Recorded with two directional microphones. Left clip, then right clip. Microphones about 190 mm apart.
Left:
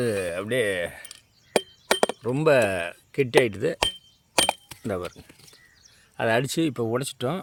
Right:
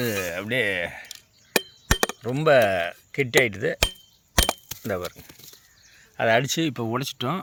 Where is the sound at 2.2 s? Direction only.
15° left (ahead or behind).